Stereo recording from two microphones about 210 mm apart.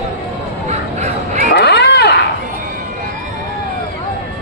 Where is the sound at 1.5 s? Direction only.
50° left (ahead or behind).